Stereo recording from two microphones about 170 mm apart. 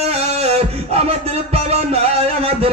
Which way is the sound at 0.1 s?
35° right (ahead or behind).